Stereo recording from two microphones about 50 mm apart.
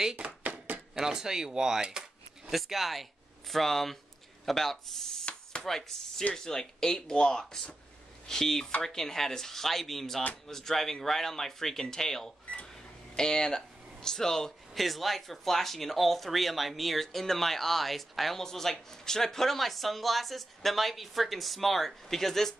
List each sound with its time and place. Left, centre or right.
0.1 s chopping: right
0.9 s speech: centre
5.2 s chop: left
5.7 s speech: centre
14.7 s speech: centre